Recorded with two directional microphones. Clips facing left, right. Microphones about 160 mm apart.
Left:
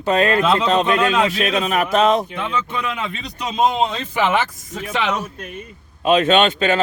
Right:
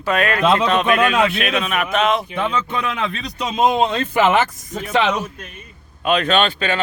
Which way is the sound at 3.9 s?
55° right (ahead or behind).